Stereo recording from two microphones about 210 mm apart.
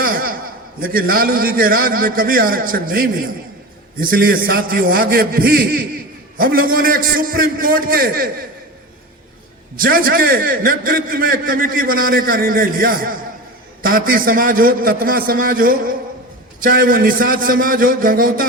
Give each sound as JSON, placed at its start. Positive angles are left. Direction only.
{"t": 0.0, "sound": "a sound", "side_deg": -45}
{"t": 0.8, "sound": "a man's voice", "side_deg": -45}
{"t": 9.7, "sound": "a man's voice", "side_deg": -45}